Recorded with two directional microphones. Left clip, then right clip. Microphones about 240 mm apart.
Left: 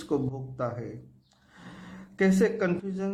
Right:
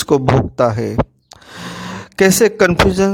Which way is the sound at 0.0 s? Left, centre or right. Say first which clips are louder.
Right 17 dB; right.